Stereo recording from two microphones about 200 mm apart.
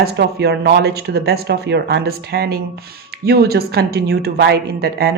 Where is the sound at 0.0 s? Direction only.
55° right (ahead or behind).